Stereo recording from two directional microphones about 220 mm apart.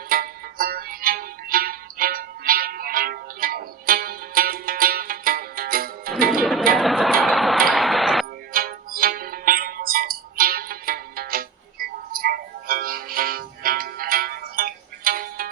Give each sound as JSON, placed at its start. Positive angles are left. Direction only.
{"t": 0.1, "sound": "music", "side_deg": -40}
{"t": 6.4, "sound": "music", "side_deg": 0}
{"t": 6.7, "sound": "a sound", "side_deg": 0}
{"t": 8.5, "sound": "music", "side_deg": -40}